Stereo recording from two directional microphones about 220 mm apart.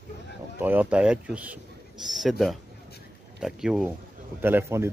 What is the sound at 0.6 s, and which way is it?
Speech, 10° right (ahead or behind).